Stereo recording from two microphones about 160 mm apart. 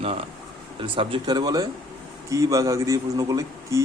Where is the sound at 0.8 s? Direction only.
35° right (ahead or behind).